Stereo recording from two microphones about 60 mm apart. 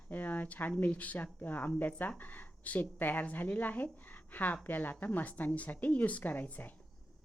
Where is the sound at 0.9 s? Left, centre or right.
Left.